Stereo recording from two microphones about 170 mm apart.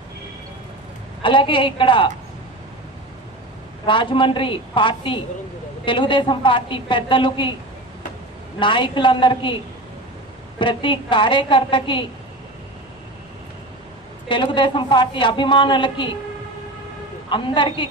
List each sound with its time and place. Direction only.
1.2 s a man's voice: 30° left (ahead or behind)
3.8 s a man's voice: 30° left (ahead or behind)
8.5 s a man's voice: 30° left (ahead or behind)
10.6 s a man's voice: 30° left (ahead or behind)
14.3 s a man's voice: 30° left (ahead or behind)
17.3 s a man's voice: 30° left (ahead or behind)